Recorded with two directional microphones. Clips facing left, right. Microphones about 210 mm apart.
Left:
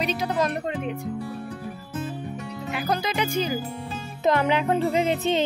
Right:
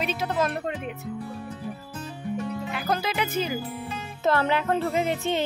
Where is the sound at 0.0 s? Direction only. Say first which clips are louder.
Left 2 dB; 5° right (ahead or behind).